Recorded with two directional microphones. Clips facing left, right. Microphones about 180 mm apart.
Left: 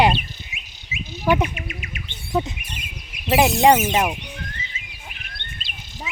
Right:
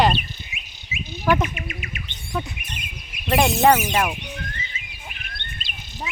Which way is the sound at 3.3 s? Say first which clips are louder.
Left 2 dB; centre (ahead or behind).